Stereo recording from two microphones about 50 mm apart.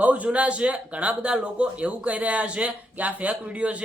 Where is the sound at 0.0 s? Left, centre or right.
Right.